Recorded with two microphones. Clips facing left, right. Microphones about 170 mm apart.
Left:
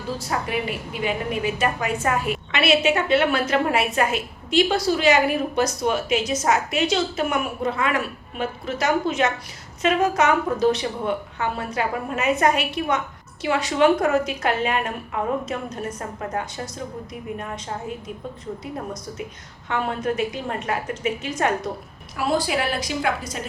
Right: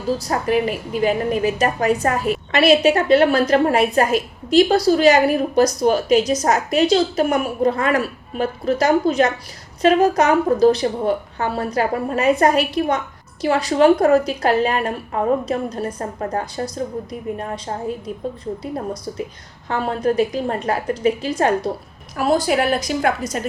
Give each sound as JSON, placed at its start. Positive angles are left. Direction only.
{"t": 0.2, "sound": "a woman's voice", "side_deg": -40}
{"t": 19.6, "sound": "a woman's voice", "side_deg": -35}
{"t": 22.2, "sound": "a woman's voice", "side_deg": -45}